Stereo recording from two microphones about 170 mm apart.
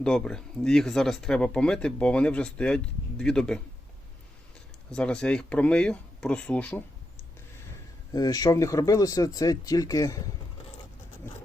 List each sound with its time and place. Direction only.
0.0 s speech: 5° left (ahead or behind)
4.9 s speech: 5° left (ahead or behind)
8.1 s speech: 20° left (ahead or behind)